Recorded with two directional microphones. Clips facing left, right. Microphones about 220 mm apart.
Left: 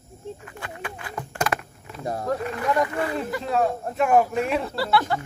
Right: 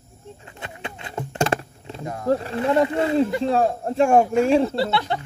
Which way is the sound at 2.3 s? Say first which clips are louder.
Right 6 dB; 30° right (ahead or behind).